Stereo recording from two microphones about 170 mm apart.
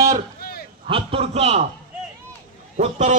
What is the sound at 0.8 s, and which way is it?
Speech, 35° right (ahead or behind).